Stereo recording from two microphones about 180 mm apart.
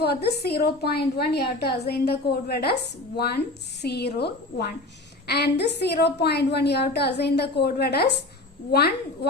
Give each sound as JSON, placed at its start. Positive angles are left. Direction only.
{"t": 0.0, "sound": "a woman's voice", "side_deg": 65}